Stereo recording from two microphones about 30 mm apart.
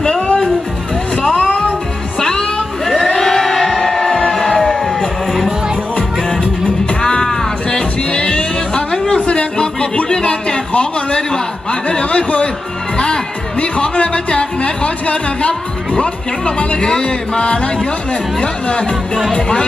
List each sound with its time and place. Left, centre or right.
0.0 s music: left
1.4 s music: left
2.1 s a sound: centre
3.2 s crowd: centre
4.8 s a sound: centre
7.0 s music: left
8.9 s a sound: left
9.2 s music: left
10.7 s a sound: left
11.9 s speech: left
13.6 s speech: left
16.8 s music: left
18.4 s speech: left